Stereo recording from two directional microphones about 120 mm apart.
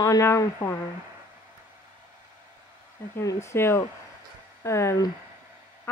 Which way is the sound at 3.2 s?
25° left (ahead or behind).